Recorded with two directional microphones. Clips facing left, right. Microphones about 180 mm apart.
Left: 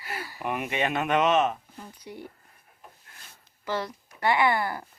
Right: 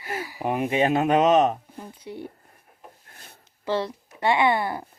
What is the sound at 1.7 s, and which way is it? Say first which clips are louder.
Speech: right 5 dB; 20° right (ahead or behind).